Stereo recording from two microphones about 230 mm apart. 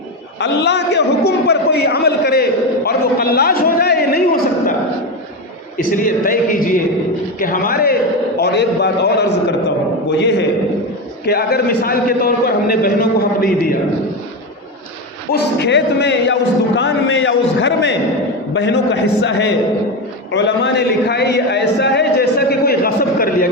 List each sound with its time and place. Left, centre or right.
0.3 s a man's voice: left
5.7 s a man's voice: left
15.3 s a man's voice: left